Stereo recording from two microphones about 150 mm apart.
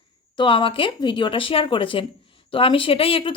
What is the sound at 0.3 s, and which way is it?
Speech, 35° left (ahead or behind).